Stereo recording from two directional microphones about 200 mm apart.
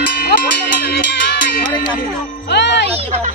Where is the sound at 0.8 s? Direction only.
55° left (ahead or behind).